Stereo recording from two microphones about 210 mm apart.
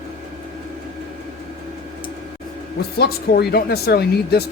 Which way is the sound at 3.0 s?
50° left (ahead or behind).